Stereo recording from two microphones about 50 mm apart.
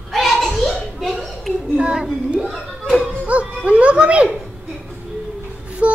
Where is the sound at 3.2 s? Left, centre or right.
Right.